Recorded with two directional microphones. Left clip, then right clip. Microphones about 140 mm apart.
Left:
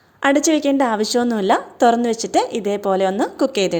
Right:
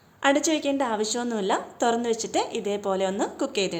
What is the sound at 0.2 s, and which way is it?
A woman's voice, 50° left (ahead or behind).